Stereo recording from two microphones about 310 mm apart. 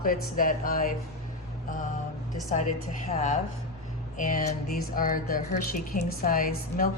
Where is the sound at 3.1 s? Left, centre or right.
Left.